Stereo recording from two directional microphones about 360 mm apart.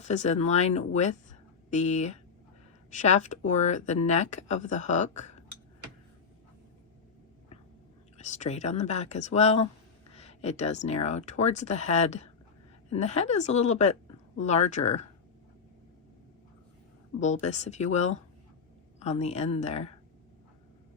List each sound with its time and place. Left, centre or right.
0.1 s speech: centre
8.2 s speech: centre
17.2 s speech: centre